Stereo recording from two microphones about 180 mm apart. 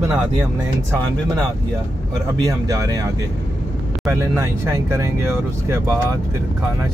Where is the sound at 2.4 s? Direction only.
20° right (ahead or behind).